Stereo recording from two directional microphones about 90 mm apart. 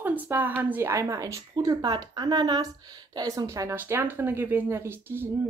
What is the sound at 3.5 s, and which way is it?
Speech, 30° right (ahead or behind).